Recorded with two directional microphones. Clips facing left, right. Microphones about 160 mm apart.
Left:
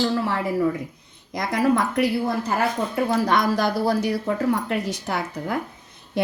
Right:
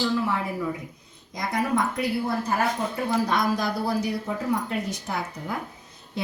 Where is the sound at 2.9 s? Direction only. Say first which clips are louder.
Left 4 dB; 75° left (ahead or behind).